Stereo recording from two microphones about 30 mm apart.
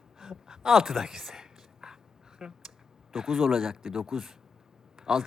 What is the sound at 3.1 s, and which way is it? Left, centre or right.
A man's voice, centre.